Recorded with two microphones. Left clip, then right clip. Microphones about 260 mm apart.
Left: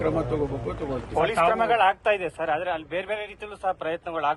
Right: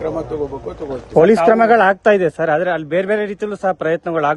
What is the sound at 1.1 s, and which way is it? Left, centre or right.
A man's voice, right.